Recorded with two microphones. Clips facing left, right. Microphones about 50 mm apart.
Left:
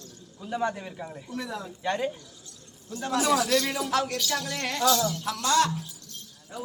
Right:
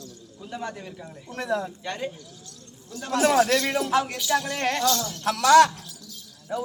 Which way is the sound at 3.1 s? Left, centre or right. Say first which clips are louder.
Right 4 dB; right.